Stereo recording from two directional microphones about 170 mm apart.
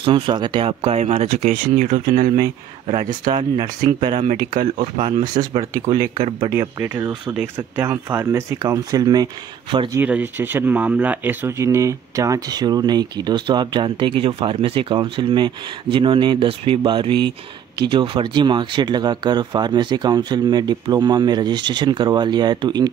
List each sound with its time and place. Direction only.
0.0 s speech: 30° right (ahead or behind); by 2.3 s 45° right (ahead or behind)
2.3 s speech: 30° right (ahead or behind)
4.1 s speech: 40° right (ahead or behind)
6.5 s speech: 15° right (ahead or behind)
9.9 s speech: 10° right (ahead or behind); by 22.8 s 25° right (ahead or behind)